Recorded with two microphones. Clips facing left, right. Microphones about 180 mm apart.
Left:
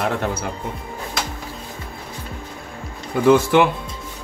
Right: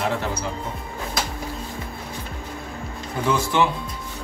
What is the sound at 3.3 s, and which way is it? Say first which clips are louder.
Speech: left 7 dB; 60° left (ahead or behind).